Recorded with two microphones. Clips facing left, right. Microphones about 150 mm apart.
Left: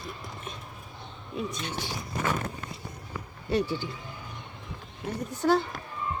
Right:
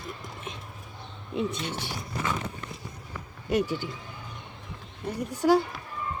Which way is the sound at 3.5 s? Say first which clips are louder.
Right 1 dB; 15° right (ahead or behind).